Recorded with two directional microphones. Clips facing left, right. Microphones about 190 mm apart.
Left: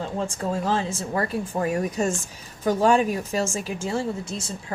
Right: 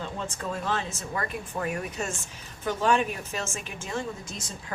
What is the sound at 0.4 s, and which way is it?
A woman's voice, 35° left (ahead or behind).